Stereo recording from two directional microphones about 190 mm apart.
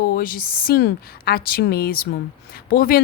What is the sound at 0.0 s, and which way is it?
Speech, 50° left (ahead or behind).